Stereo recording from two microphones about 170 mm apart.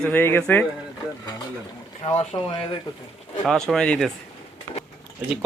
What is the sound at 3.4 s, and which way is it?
Speech, centre (ahead or behind).